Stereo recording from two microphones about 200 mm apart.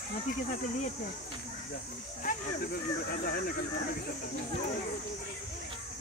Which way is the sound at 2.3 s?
45° left (ahead or behind).